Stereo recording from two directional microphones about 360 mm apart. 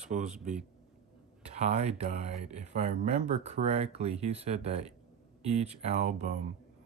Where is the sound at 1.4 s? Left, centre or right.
Centre.